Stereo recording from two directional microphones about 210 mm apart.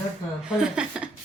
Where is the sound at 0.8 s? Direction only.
5° right (ahead or behind).